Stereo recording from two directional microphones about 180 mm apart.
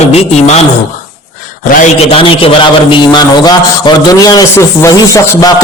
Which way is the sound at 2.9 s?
25° left (ahead or behind).